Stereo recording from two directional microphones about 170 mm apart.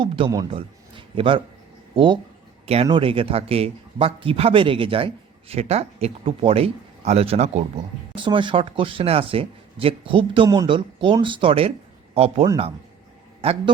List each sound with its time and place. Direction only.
0.0 s speech: 25° right (ahead or behind)
0.5 s a sound: 30° right (ahead or behind)
2.8 s a man's voice: 30° right (ahead or behind)